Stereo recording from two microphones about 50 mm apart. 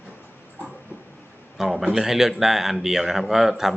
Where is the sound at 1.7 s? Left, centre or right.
Centre.